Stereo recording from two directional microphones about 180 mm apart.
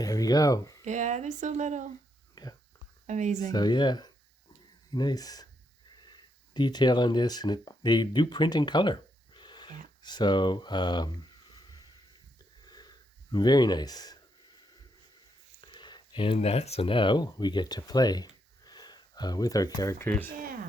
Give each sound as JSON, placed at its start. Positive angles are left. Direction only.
{"t": 0.0, "sound": "speech", "side_deg": 20}
{"t": 0.9, "sound": "speech", "side_deg": -40}
{"t": 2.3, "sound": "whispering", "side_deg": 20}
{"t": 3.1, "sound": "speech", "side_deg": -40}
{"t": 3.5, "sound": "speech", "side_deg": 25}
{"t": 12.6, "sound": "a sound", "side_deg": 20}
{"t": 15.6, "sound": "speech", "side_deg": 25}